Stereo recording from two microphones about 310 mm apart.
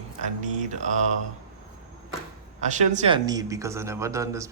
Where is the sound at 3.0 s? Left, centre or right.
Centre.